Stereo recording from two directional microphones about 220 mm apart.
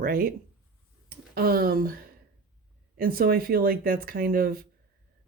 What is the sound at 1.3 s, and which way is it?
Speech, 45° right (ahead or behind).